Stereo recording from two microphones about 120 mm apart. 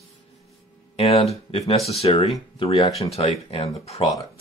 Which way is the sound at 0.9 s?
55° left (ahead or behind).